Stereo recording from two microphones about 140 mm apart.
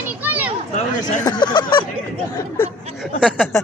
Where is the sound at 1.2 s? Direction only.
30° left (ahead or behind).